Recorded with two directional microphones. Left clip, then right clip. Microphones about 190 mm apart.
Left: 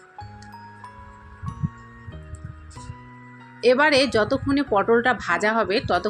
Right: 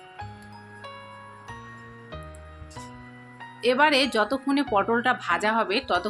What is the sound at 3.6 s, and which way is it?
Speech, 15° left (ahead or behind).